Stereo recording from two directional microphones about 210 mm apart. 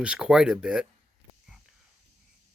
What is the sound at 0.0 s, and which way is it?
Speech, 5° right (ahead or behind).